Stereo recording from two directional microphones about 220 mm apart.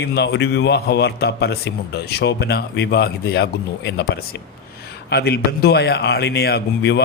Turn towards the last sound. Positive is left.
turn(degrees=50)  # may be behind; listen again after turning